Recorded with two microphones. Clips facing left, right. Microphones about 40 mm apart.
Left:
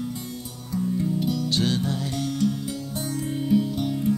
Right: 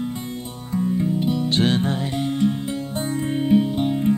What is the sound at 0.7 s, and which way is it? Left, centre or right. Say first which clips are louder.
Music: right 4 dB; right.